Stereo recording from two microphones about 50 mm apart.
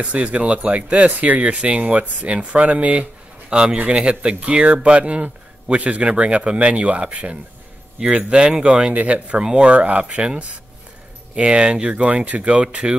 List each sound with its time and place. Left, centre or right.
0.0 s speech: right
8.9 s speech: right
9.4 s speech: centre